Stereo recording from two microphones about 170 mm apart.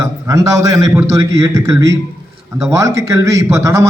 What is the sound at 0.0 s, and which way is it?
A man's voice, 20° right (ahead or behind).